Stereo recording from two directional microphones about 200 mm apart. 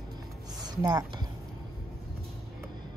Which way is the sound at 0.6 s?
15° right (ahead or behind).